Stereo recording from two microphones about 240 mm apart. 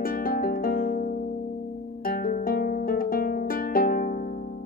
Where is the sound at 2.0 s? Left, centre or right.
Left.